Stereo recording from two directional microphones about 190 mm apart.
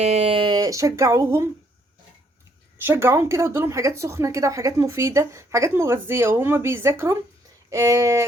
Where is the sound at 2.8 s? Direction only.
10° right (ahead or behind).